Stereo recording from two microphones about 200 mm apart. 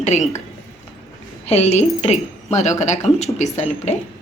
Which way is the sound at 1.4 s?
35° left (ahead or behind).